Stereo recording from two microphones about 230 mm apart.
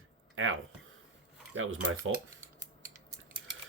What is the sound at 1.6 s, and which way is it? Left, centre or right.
Speech, right.